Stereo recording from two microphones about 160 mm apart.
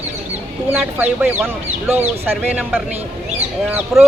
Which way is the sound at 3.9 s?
Centre (ahead or behind).